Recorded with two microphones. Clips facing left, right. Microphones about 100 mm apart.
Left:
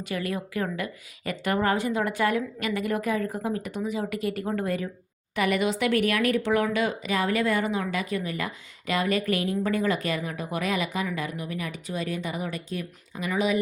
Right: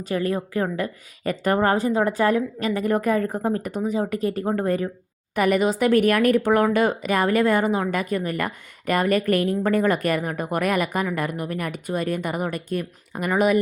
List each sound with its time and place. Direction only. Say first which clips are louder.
0.0 s a woman's voice: right 6 dB; 35° right (ahead or behind); by 13.6 s 55° right (ahead or behind)